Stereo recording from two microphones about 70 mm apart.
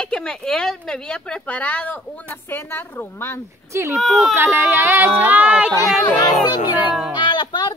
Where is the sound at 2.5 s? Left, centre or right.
Left.